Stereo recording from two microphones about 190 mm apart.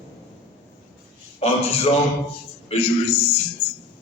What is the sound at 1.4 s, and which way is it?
A man's voice, 30° left (ahead or behind).